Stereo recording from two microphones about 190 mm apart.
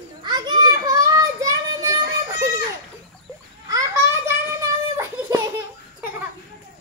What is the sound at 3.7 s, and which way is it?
Children playing, 20° right (ahead or behind).